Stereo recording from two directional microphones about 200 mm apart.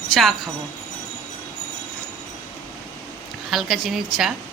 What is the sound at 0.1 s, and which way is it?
Speech, centre (ahead or behind).